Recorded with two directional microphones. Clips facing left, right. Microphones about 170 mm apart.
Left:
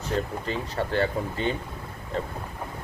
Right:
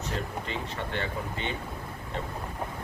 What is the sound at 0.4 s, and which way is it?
Speech, 40° left (ahead or behind).